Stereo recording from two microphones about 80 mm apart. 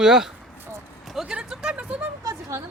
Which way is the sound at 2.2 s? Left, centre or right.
Right.